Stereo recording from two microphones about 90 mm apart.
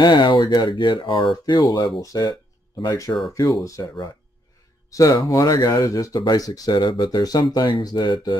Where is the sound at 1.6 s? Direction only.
40° left (ahead or behind).